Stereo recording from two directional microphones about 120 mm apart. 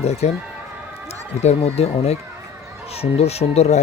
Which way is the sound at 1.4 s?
65° left (ahead or behind).